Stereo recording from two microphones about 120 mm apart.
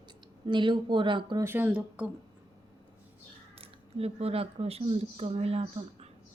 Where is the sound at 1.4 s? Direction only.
20° right (ahead or behind).